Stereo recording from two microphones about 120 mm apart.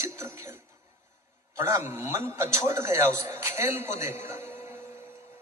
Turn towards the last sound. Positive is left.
turn(degrees=-20)  # may be behind; listen again after turning